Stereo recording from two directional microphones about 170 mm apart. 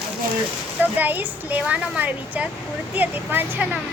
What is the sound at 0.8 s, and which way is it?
Speech, 10° right (ahead or behind).